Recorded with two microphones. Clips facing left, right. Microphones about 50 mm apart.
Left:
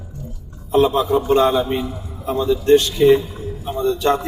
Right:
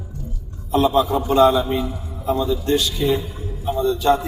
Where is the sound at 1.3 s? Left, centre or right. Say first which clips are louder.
Right 4 dB; left.